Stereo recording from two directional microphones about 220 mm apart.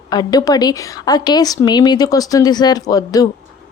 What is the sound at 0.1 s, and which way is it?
A woman's voice, 20° left (ahead or behind).